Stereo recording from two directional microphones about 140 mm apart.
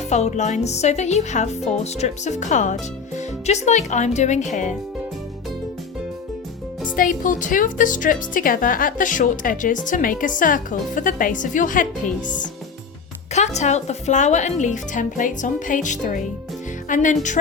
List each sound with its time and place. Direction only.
0.1 s speech: 55° left (ahead or behind)
6.9 s speech: 80° left
13.3 s speech: 55° left (ahead or behind)